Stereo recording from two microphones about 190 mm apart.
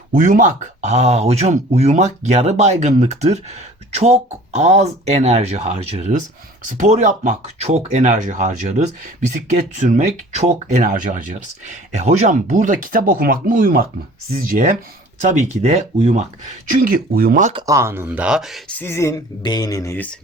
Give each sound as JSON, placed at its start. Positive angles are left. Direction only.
{"t": 0.1, "sound": "speech", "side_deg": -40}
{"t": 16.8, "sound": "speech", "side_deg": -50}
{"t": 17.5, "sound": "speech", "side_deg": -20}
{"t": 18.8, "sound": "speech", "side_deg": 15}